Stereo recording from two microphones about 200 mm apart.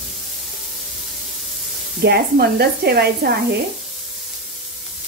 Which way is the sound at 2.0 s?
50° right (ahead or behind).